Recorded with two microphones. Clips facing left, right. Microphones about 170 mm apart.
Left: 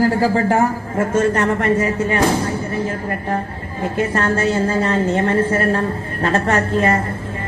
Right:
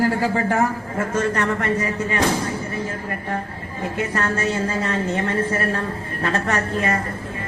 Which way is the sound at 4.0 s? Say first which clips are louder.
Left 5 dB; 30° left (ahead or behind).